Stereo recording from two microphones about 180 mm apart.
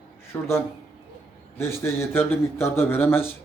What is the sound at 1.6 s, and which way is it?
A man's voice, 15° left (ahead or behind).